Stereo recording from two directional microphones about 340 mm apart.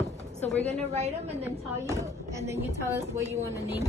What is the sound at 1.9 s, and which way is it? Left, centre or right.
Speech, centre.